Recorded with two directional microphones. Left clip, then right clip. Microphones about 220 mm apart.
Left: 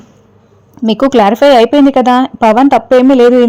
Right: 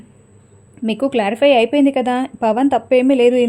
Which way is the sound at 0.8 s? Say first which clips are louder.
Left 10 dB; 30° left (ahead or behind).